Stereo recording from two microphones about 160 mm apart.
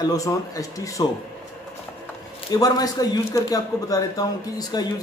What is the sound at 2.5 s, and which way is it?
Speech, 25° left (ahead or behind).